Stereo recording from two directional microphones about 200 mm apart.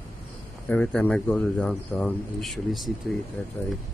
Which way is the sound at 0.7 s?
5° left (ahead or behind).